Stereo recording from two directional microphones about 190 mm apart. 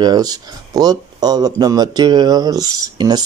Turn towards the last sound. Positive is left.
turn(degrees=-20)  # may be behind; listen again after turning